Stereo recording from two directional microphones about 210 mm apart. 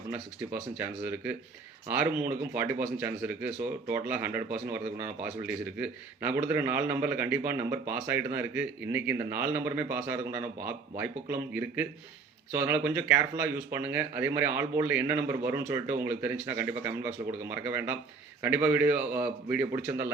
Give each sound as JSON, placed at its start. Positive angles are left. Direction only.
{"t": 0.1, "sound": "speech", "side_deg": -10}